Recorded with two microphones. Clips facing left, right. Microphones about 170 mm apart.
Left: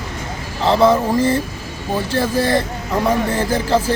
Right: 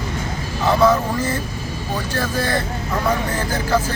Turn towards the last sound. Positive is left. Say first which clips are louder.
# left 3 dB
turn(degrees=30)  # may be behind; listen again after turning